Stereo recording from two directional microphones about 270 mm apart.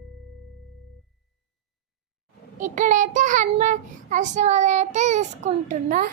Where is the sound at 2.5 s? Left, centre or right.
Right.